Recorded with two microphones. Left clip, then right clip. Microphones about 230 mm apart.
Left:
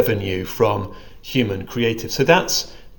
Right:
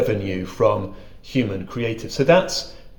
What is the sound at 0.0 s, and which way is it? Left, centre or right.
A man's voice, left.